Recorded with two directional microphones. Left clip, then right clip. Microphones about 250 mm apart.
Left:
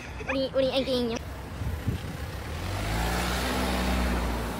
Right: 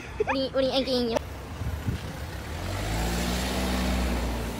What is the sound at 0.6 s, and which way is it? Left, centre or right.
Speech, left.